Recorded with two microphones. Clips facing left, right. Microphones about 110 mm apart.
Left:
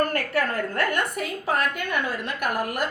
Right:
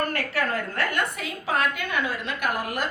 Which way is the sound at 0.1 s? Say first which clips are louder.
Left 2 dB; 45° left (ahead or behind).